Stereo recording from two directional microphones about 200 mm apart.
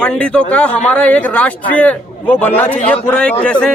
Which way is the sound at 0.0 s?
5° left (ahead or behind).